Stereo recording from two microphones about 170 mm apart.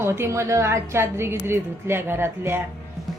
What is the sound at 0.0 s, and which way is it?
A woman's voice, 15° right (ahead or behind).